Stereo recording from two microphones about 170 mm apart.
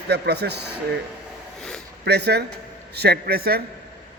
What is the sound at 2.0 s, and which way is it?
A man's voice, 75° right (ahead or behind).